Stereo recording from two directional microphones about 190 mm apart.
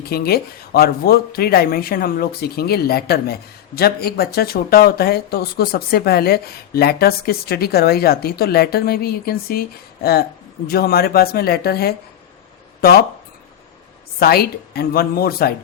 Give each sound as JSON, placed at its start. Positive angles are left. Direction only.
{"t": 0.1, "sound": "speech", "side_deg": 55}
{"t": 14.2, "sound": "speech", "side_deg": 55}